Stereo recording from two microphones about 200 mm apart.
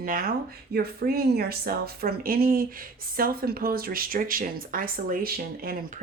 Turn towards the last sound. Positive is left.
turn(degrees=-50)  # may be behind; listen again after turning